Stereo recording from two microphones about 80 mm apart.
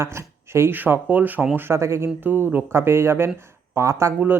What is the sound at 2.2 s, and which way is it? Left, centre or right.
Speech, right.